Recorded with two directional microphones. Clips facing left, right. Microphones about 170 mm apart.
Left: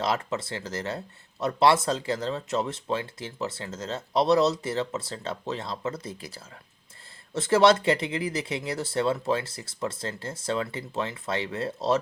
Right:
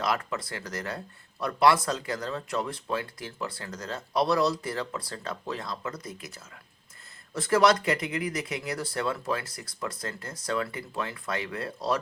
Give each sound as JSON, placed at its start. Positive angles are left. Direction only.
{"t": 0.0, "sound": "speech", "side_deg": 25}